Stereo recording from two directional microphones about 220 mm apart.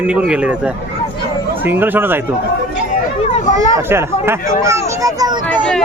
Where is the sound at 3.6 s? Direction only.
15° right (ahead or behind).